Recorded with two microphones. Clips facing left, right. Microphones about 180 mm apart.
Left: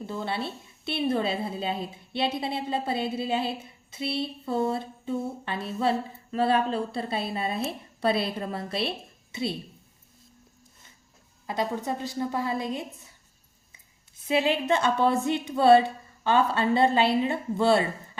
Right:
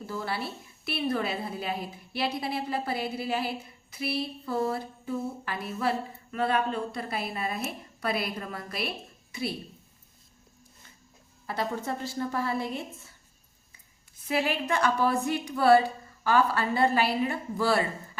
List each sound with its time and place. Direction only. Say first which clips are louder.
0.0 s a woman's voice: left 2 dB; 25° left (ahead or behind)
11.4 s a woman's voice: left 2 dB; 20° left (ahead or behind)
14.3 s a woman's voice: left 4 dB; 20° left (ahead or behind)